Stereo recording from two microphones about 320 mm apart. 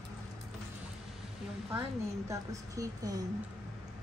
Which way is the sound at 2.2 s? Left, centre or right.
Centre.